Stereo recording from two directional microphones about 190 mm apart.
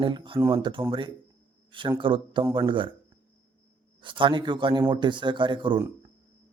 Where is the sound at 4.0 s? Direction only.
25° right (ahead or behind).